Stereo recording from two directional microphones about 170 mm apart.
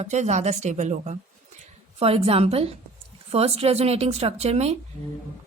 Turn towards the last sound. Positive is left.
turn(degrees=-40)  # may be behind; listen again after turning